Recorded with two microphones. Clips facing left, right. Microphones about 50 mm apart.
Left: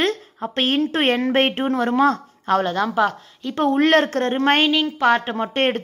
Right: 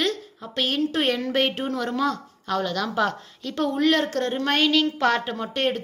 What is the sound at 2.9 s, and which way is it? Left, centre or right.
Speech, centre.